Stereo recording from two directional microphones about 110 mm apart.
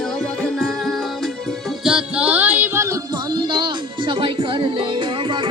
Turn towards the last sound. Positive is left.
turn(degrees=-50)  # may be behind; listen again after turning